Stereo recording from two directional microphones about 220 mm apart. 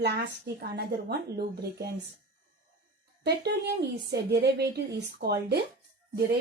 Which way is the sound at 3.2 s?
50° right (ahead or behind).